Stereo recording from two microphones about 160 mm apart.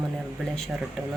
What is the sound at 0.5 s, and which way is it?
Speech, centre (ahead or behind).